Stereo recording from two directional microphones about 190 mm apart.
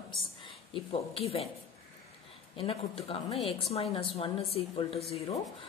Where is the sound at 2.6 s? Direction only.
30° left (ahead or behind).